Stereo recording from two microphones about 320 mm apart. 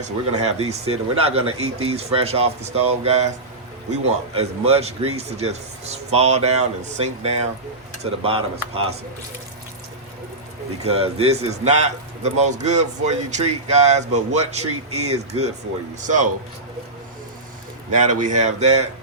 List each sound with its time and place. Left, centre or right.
0.0 s a man's voice: right
4.4 s a man's voice: centre
10.8 s a man's voice: centre
17.9 s a man's voice: right